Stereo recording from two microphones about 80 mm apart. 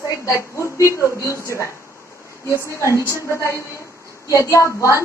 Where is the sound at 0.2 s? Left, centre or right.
Left.